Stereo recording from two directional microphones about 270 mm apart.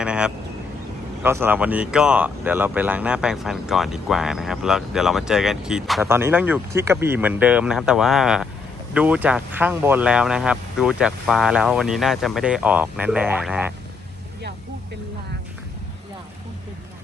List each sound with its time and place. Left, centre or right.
0.0 s vehicle: centre
1.2 s speech: centre